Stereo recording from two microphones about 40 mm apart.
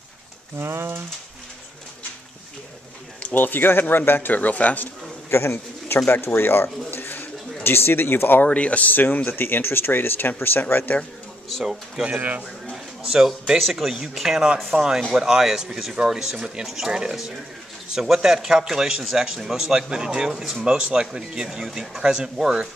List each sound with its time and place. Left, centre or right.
0.6 s speech: right
3.3 s speech: left
4.3 s speech: left
5.3 s pigeon: left
6.0 s speech: left
8.5 s speech: left
8.9 s speech: left
12.2 s a man's voice: right
12.7 s a sound: centre
13.6 s speech: centre
17.9 s speech: centre